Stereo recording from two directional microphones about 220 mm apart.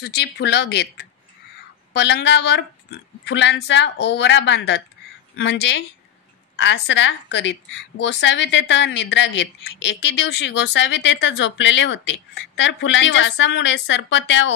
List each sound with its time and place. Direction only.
0.0 s a woman's voice: 50° left (ahead or behind)